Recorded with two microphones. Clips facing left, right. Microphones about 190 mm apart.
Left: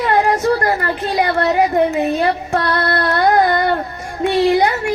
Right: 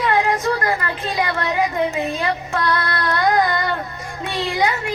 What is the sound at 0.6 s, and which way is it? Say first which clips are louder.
A woman's voice: left 4 dB; 40° left (ahead or behind).